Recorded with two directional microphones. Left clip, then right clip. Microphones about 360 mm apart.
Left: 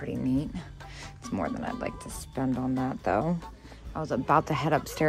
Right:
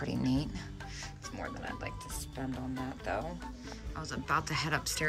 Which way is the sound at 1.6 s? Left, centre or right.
Centre.